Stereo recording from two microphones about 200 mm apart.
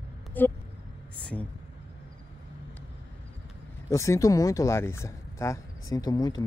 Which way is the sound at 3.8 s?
15° left (ahead or behind).